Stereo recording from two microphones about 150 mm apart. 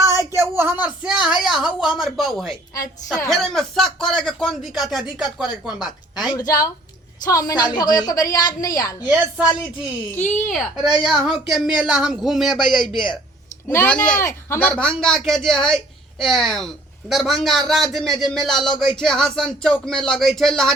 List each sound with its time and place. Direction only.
0.2 s speech: 20° right (ahead or behind)
6.3 s a woman's voice: 25° left (ahead or behind)
10.5 s speech: centre (ahead or behind)
13.7 s speech: 10° left (ahead or behind)